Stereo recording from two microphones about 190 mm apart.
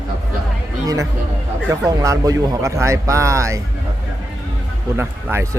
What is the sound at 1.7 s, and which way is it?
Speech, 15° right (ahead or behind).